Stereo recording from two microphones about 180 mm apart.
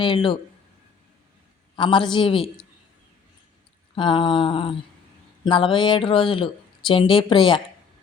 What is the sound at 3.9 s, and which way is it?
A woman's voice, 25° left (ahead or behind).